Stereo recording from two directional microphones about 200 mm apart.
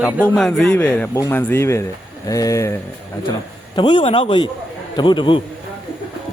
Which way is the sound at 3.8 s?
25° left (ahead or behind).